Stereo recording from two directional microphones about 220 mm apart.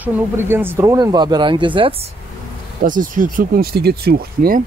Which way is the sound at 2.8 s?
40° right (ahead or behind).